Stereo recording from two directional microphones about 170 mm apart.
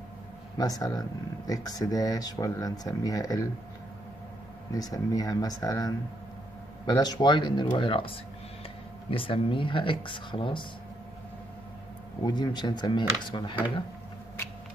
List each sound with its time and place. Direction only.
0.6 s speech: 20° left (ahead or behind)
4.7 s speech: 20° left (ahead or behind)
12.2 s speech: 25° left (ahead or behind)